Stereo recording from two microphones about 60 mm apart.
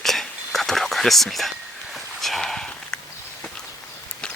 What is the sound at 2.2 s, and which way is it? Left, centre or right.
Sniff, centre.